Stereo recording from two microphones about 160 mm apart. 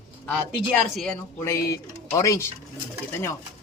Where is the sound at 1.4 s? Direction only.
20° left (ahead or behind).